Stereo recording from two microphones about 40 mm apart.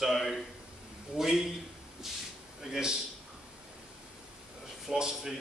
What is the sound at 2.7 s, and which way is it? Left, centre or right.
Speech, centre.